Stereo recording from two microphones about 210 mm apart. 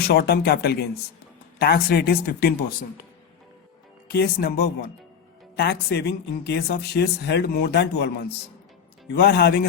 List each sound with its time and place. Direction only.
0.0 s speech: 50° left (ahead or behind)
4.1 s speech: 50° left (ahead or behind)
9.1 s speech: 50° left (ahead or behind)